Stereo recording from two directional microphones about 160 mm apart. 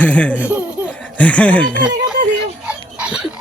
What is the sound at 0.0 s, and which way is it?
Speech, 10° left (ahead or behind).